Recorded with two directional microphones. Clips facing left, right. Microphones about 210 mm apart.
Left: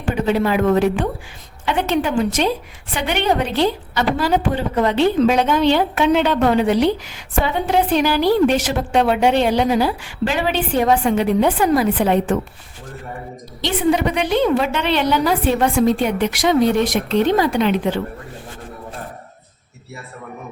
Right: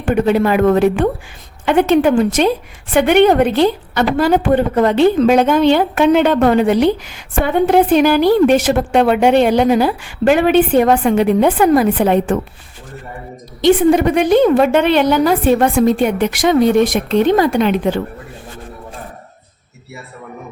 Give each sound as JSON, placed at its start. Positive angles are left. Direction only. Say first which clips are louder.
{"t": 0.0, "sound": "a woman's voice", "louder": "right 5 dB", "side_deg": -55}
{"t": 13.6, "sound": "a woman's voice", "louder": "right 7 dB", "side_deg": -50}